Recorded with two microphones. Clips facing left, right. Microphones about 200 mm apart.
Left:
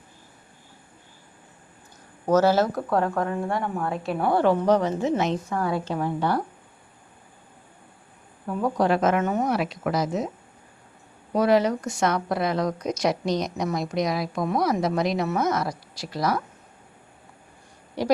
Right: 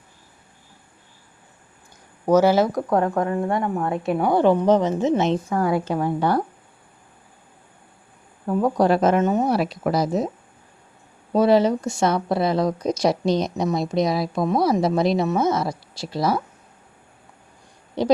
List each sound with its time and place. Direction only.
2.2 s a woman's voice: 10° right (ahead or behind)
5.9 s a woman's voice: 45° right (ahead or behind)
8.4 s speech: 40° right (ahead or behind)
9.2 s a woman's voice: 20° right (ahead or behind)
9.5 s speech: 35° right (ahead or behind)
11.3 s a woman's voice: 30° right (ahead or behind)
18.0 s a woman's voice: 25° right (ahead or behind)